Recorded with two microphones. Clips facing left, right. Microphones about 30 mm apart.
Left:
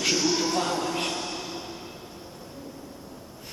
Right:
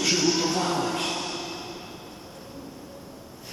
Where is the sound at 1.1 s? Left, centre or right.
Centre.